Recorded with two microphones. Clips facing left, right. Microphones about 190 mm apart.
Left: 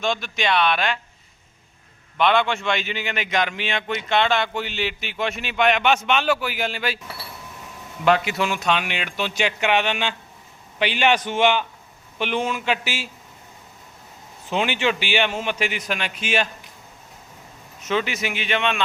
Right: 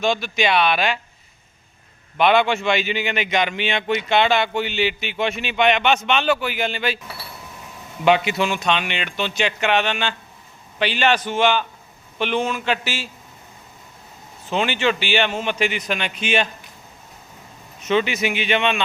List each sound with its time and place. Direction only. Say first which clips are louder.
0.0 s speech: right 4 dB; 5° right (ahead or behind)
2.1 s speech: right 3 dB; 10° right (ahead or behind)
8.0 s speech: right 2 dB; centre (ahead or behind)
14.5 s speech: right 2 dB; 10° left (ahead or behind)
17.8 s speech: right 4 dB; centre (ahead or behind)